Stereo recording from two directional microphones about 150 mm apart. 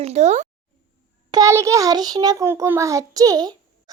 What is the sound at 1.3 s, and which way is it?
A child's voice, 20° right (ahead or behind).